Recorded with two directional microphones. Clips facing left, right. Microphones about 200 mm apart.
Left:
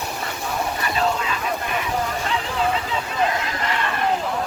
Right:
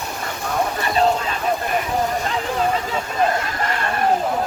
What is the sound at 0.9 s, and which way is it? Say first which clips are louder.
Vehicle: right 5 dB; 40° right (ahead or behind).